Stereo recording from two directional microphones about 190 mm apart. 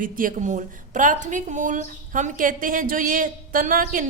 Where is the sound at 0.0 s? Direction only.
45° right (ahead or behind).